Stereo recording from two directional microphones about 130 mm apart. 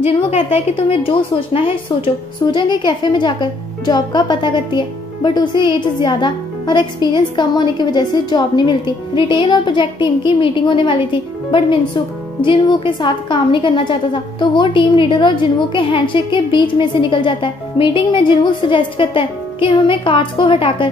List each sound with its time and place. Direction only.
0.0 s a woman's voice: 50° left (ahead or behind)